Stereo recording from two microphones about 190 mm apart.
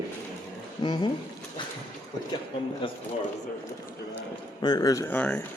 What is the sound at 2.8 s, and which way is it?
Speech, 25° left (ahead or behind).